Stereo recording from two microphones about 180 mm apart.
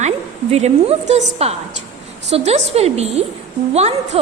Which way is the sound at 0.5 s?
35° right (ahead or behind).